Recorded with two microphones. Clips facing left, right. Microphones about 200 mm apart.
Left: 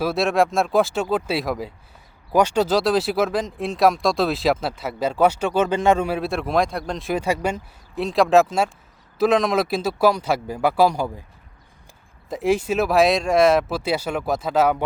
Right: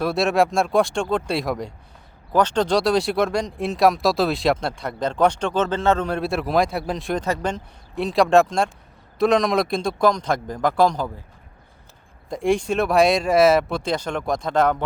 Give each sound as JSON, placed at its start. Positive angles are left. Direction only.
{"t": 0.0, "sound": "a man's voice", "side_deg": 0}
{"t": 12.3, "sound": "speech", "side_deg": 5}